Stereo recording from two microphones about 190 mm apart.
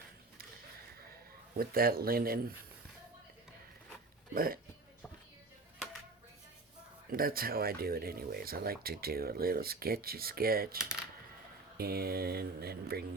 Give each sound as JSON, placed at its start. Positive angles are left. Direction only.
{"t": 1.5, "sound": "speech", "side_deg": -50}
{"t": 4.4, "sound": "speech", "side_deg": -50}
{"t": 7.1, "sound": "speech", "side_deg": -50}
{"t": 11.8, "sound": "speech", "side_deg": -55}